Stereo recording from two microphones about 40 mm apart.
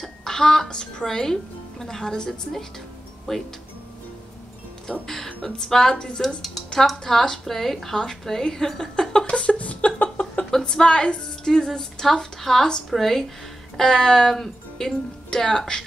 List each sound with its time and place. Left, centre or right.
0.0 s a sound: centre
1.0 s a woman's voice: centre
5.0 s a woman's voice: centre
5.9 s a woman's voice: left
9.2 s a sound: left
10.7 s a woman's voice: left
15.2 s a woman's voice: centre